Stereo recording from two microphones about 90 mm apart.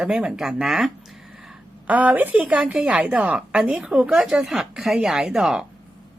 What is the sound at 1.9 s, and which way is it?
A woman's voice, 15° right (ahead or behind).